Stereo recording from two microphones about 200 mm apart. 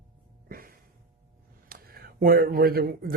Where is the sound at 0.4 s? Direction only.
45° right (ahead or behind).